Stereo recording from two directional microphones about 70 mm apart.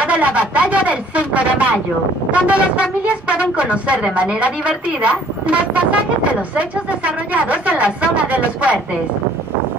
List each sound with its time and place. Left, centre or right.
0.0 s speech: centre
7.3 s speech: right